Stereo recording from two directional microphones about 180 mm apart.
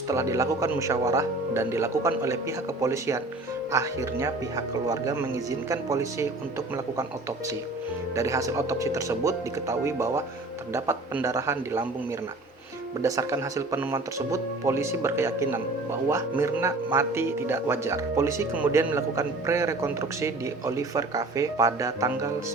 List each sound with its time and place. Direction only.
0.1 s speech: 15° right (ahead or behind)
8.1 s speech: 15° right (ahead or behind)
13.0 s speech: 15° right (ahead or behind)